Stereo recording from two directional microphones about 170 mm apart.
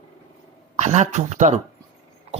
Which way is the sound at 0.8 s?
40° right (ahead or behind).